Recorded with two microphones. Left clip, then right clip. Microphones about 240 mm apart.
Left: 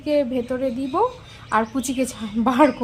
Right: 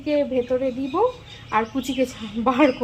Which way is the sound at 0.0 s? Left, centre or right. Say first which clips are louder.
Even; centre.